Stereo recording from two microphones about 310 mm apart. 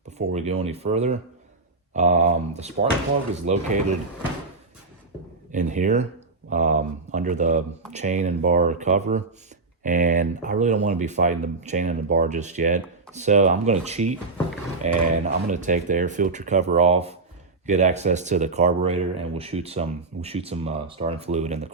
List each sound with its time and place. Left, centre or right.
0.2 s speech: right
5.5 s speech: right